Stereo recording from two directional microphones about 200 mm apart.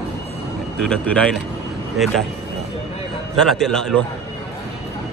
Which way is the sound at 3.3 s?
5° left (ahead or behind).